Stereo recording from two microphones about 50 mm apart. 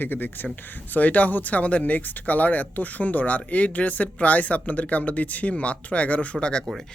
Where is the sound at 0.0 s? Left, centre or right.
Left.